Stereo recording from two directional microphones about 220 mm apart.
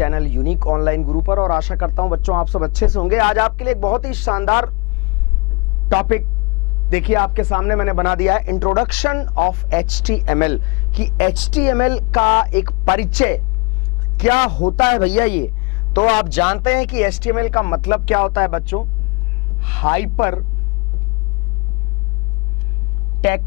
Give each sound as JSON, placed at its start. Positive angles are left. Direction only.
{"t": 0.0, "sound": "speech", "side_deg": 15}
{"t": 5.9, "sound": "speech", "side_deg": 15}
{"t": 9.2, "sound": "speech", "side_deg": 20}
{"t": 9.7, "sound": "speech", "side_deg": 10}
{"t": 13.0, "sound": "speech", "side_deg": 10}
{"t": 14.3, "sound": "speech", "side_deg": 25}
{"t": 15.0, "sound": "speech", "side_deg": 10}